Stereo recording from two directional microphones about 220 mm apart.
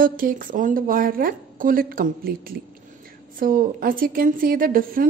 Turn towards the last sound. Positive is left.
turn(degrees=-40)  # may be behind; listen again after turning